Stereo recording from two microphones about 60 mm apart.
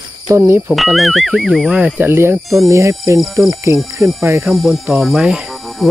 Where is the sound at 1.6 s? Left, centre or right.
Centre.